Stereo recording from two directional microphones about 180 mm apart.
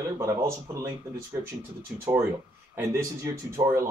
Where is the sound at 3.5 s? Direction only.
15° right (ahead or behind).